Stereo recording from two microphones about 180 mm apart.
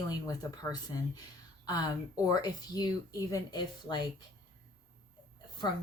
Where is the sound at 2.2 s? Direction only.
20° left (ahead or behind).